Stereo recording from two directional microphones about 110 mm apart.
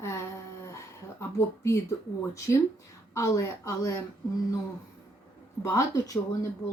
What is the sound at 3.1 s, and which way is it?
Speech, 30° left (ahead or behind).